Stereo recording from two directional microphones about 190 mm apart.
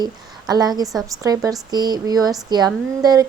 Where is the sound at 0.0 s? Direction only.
20° right (ahead or behind).